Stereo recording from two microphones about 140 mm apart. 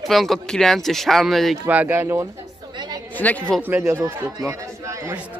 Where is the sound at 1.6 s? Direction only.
10° right (ahead or behind).